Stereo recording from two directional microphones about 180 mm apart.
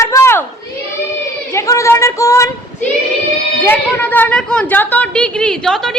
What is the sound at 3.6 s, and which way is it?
A woman's voice, 10° left (ahead or behind).